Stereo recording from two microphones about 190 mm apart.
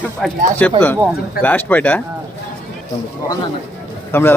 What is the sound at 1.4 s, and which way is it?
Speech, 10° left (ahead or behind).